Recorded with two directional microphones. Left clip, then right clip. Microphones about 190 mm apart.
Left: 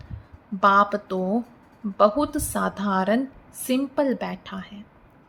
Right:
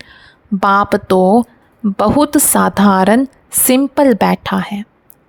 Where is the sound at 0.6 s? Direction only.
55° right (ahead or behind).